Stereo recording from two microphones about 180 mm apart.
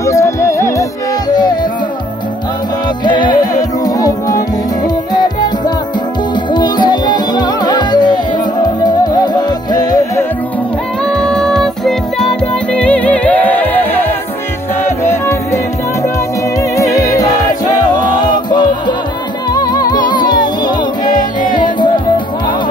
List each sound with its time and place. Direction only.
0.0 s music: 15° left (ahead or behind)
3.1 s music: 25° left (ahead or behind)
6.5 s music: 25° left (ahead or behind)
11.1 s music: 5° left (ahead or behind)
18.3 s music: 25° left (ahead or behind)